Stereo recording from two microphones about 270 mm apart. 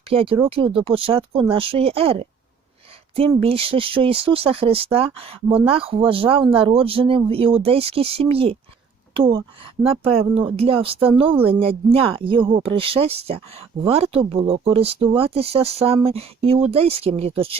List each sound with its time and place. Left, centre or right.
0.1 s speech: right